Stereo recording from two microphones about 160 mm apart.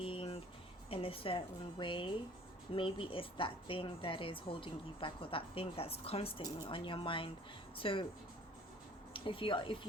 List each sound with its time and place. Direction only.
0.0 s music: 35° left (ahead or behind)
0.9 s a woman's voice: 35° left (ahead or behind)
9.1 s speech: 30° left (ahead or behind)